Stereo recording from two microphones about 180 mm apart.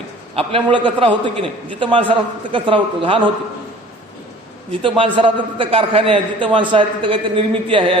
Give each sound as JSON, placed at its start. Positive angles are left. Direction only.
{"t": 0.3, "sound": "a man's voice", "side_deg": -30}
{"t": 4.7, "sound": "a man's voice", "side_deg": -30}